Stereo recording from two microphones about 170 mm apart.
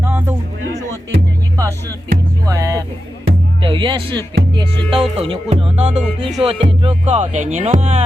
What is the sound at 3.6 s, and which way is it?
Speech, 30° right (ahead or behind).